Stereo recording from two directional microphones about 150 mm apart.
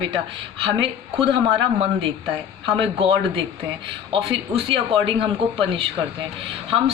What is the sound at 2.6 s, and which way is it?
Speech, 35° right (ahead or behind).